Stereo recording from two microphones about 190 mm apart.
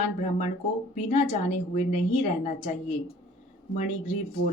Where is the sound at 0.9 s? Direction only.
35° left (ahead or behind).